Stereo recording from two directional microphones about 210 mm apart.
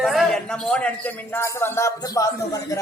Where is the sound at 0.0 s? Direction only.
Centre (ahead or behind).